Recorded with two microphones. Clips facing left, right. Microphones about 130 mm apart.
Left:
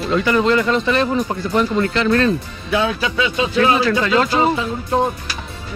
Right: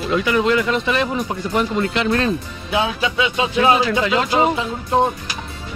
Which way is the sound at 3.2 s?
15° right (ahead or behind).